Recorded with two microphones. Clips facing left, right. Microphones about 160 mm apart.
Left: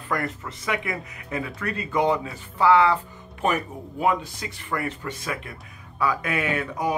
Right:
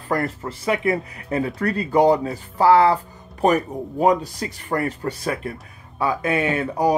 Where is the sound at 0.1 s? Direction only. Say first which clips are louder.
Right 5 dB; 35° right (ahead or behind).